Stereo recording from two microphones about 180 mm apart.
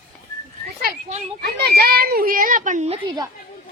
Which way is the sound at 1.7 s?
60° right (ahead or behind).